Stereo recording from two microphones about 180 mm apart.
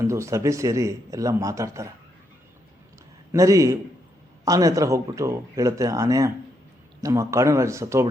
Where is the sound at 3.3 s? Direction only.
20° right (ahead or behind).